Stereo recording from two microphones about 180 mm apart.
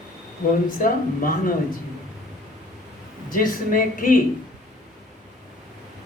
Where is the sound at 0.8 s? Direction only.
50° left (ahead or behind).